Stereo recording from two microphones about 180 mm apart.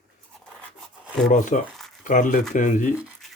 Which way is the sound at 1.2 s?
45° left (ahead or behind).